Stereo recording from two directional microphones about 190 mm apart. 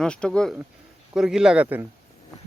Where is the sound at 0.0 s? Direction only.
5° left (ahead or behind).